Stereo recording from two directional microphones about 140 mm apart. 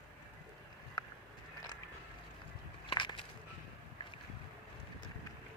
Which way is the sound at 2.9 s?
35° left (ahead or behind).